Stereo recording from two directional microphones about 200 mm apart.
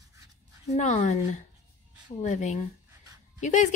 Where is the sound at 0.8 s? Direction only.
35° left (ahead or behind).